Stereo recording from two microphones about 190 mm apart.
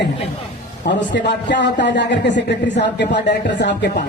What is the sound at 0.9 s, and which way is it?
A woman's voice, 70° left (ahead or behind).